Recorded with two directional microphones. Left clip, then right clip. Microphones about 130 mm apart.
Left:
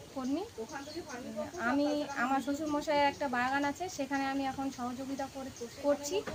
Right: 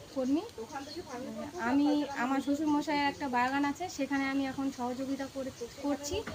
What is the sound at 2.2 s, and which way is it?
A woman's voice, 25° left (ahead or behind).